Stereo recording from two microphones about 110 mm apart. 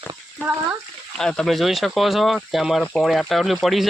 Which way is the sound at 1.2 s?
5° left (ahead or behind).